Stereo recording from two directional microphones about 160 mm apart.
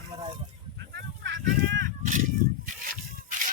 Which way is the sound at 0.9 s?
90° right.